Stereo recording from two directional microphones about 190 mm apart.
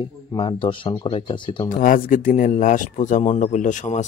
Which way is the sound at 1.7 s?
45° left (ahead or behind).